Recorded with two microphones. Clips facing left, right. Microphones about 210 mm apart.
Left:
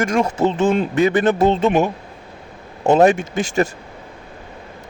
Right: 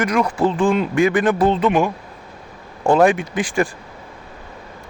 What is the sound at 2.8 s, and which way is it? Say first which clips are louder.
Speech: left 1 dB; 25° left (ahead or behind).